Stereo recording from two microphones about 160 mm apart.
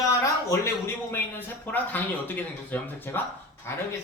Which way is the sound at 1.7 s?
10° left (ahead or behind).